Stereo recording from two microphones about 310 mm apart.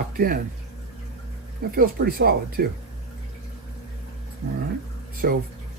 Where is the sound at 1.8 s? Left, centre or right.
Right.